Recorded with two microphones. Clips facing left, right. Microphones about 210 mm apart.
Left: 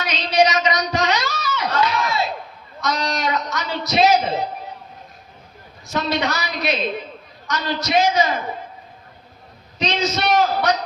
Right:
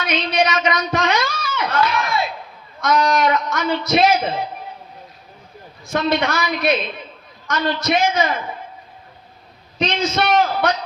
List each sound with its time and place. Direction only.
0.0 s a sound: 55° right (ahead or behind)
2.8 s a man's voice: 50° right (ahead or behind)
5.8 s a man's voice: 50° right (ahead or behind)
9.7 s a man's voice: 50° right (ahead or behind)